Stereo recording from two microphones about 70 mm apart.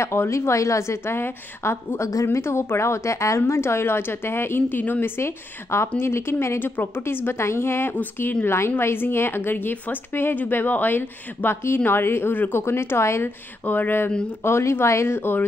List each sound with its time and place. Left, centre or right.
0.0 s a woman's voice: left
13.7 s a woman's voice: left
14.4 s a woman's voice: left